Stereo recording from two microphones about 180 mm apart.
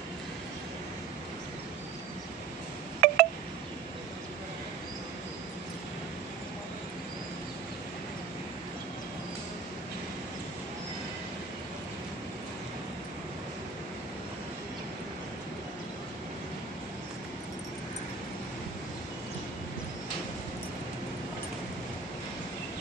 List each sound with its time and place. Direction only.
3.0 s wind chime: 55° right (ahead or behind)